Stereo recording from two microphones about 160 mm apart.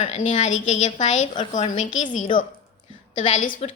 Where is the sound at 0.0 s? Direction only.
35° left (ahead or behind).